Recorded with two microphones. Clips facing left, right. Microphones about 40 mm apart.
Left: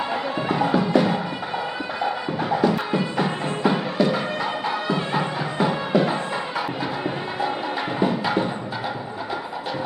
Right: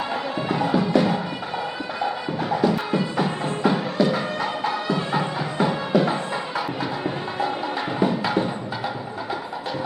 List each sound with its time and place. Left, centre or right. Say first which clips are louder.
0.4 s music: left 1 dB; left
2.9 s music: even; centre